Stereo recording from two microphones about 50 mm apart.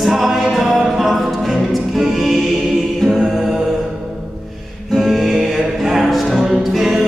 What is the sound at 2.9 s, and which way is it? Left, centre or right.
Mantra, centre.